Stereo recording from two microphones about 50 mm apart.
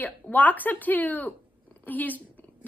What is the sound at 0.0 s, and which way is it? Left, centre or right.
A woman's voice, left.